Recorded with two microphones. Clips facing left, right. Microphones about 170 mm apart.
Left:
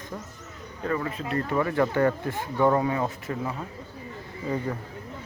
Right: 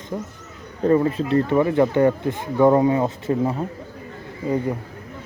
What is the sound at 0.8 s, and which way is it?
Speech, 30° right (ahead or behind).